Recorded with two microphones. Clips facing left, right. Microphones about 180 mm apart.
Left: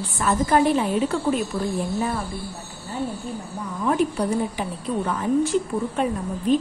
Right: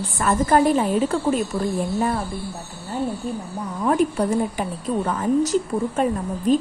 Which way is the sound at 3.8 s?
50° right (ahead or behind).